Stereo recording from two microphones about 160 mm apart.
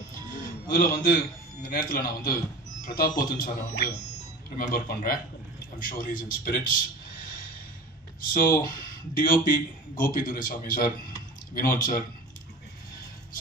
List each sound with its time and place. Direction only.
0.1 s a man's voice: 65° left (ahead or behind)